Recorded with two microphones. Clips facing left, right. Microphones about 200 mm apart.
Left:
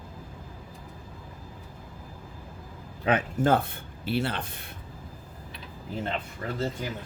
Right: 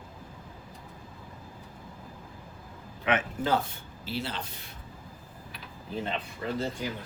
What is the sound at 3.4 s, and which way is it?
Speech, 55° left (ahead or behind).